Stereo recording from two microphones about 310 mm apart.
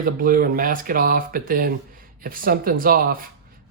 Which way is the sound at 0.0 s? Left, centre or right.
Right.